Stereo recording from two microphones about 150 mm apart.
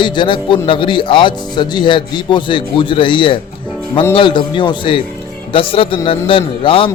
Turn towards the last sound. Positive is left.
turn(degrees=35)  # may be behind; listen again after turning